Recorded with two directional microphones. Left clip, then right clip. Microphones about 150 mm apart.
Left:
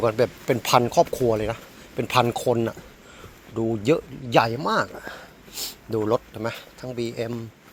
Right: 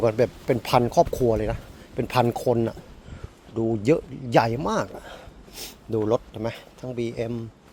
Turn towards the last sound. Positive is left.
turn(degrees=-20)  # may be behind; listen again after turning